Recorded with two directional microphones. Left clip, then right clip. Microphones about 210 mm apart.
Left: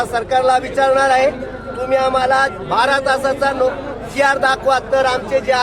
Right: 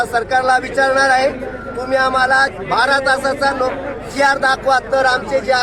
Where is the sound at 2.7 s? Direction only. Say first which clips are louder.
Right 1 dB; centre (ahead or behind).